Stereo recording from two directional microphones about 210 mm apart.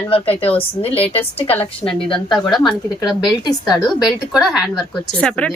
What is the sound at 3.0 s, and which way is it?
Speech, 20° left (ahead or behind).